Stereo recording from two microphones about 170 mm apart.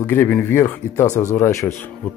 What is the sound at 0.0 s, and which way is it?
Speech, 10° left (ahead or behind).